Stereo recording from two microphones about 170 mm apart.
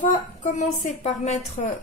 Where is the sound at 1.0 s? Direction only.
45° left (ahead or behind).